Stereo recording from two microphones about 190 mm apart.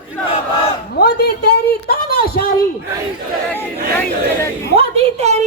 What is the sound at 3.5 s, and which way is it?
Speech, 10° left (ahead or behind).